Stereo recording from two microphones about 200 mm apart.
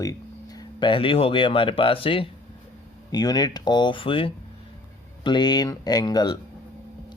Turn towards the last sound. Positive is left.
turn(degrees=20)  # may be behind; listen again after turning